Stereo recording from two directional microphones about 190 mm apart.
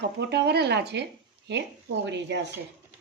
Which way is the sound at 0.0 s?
60° right (ahead or behind).